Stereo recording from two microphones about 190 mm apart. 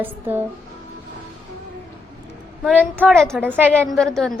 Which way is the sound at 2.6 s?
5° right (ahead or behind).